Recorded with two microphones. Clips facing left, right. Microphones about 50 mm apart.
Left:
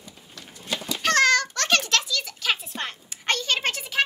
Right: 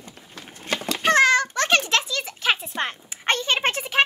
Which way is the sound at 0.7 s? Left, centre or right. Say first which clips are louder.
Right 3 dB; right.